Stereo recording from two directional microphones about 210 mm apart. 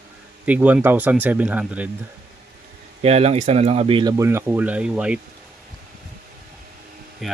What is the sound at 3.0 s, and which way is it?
Speech, 30° right (ahead or behind).